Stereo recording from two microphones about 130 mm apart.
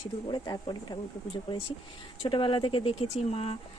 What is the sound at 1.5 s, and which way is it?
Speech, 45° left (ahead or behind).